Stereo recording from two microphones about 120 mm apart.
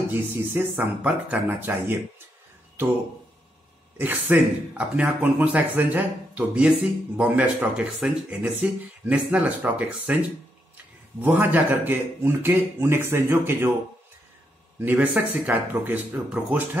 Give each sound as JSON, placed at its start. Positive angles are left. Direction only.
{"t": 0.1, "sound": "speech", "side_deg": -20}
{"t": 4.0, "sound": "speech", "side_deg": -15}
{"t": 14.8, "sound": "speech", "side_deg": -15}